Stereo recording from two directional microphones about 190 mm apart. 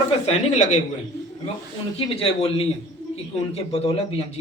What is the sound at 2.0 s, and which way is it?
A man's voice, 30° left (ahead or behind).